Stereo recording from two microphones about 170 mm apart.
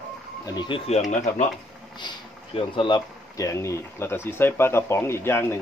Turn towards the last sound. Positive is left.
turn(degrees=15)  # may be behind; listen again after turning